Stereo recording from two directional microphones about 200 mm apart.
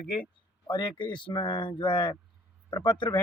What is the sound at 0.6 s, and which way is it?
Speech, 25° left (ahead or behind).